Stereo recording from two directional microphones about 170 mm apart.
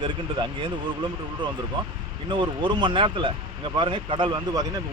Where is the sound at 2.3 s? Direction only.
30° right (ahead or behind).